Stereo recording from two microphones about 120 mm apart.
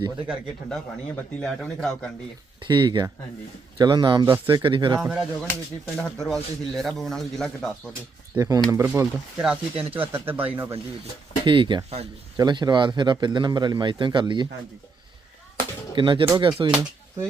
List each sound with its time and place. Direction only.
0.7 s a man's voice: 5° left (ahead or behind)
2.6 s speech: 40° right (ahead or behind)
4.9 s a man's voice: 5° right (ahead or behind)
8.4 s speech: 30° right (ahead or behind)
8.8 s speech: 20° right (ahead or behind)
9.4 s speech: 10° right (ahead or behind)
11.4 s speech: 40° right (ahead or behind)
15.5 s a sound: 40° right (ahead or behind)
16.4 s speech: 40° right (ahead or behind)